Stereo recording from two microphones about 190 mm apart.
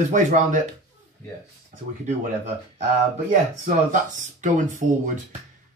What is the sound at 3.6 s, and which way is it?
Speech, 40° right (ahead or behind).